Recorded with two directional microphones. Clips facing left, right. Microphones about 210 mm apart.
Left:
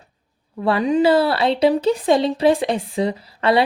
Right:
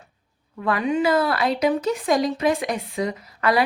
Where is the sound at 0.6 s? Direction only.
30° left (ahead or behind).